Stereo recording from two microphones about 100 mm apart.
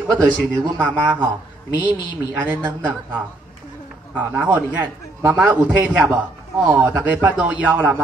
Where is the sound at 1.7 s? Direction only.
50° left (ahead or behind).